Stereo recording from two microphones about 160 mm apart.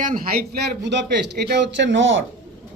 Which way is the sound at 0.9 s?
90° right.